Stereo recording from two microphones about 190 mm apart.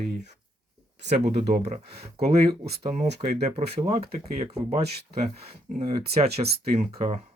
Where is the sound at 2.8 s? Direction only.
30° right (ahead or behind).